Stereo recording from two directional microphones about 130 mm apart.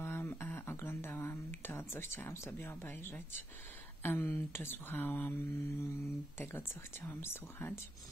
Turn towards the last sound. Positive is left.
turn(degrees=20)  # may be behind; listen again after turning